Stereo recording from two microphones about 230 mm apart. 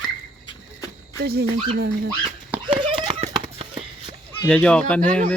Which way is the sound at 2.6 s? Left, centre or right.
Right.